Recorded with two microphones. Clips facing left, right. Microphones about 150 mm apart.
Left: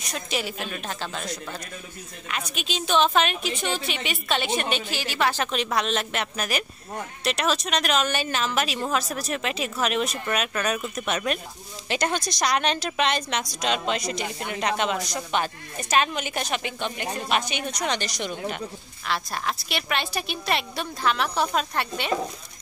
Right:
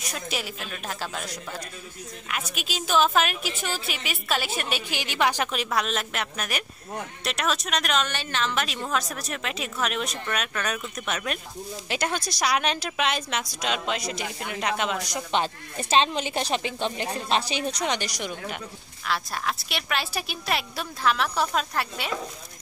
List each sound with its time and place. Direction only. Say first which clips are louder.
0.1 s a woman's voice: left 4 dB; centre (ahead or behind)
15.3 s speech: right 1 dB; 25° right (ahead or behind)
17.8 s speech: left 1 dB; 15° right (ahead or behind)
19.0 s a woman's voice: even; centre (ahead or behind)